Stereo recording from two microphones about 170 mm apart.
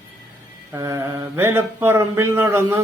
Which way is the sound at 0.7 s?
15° right (ahead or behind).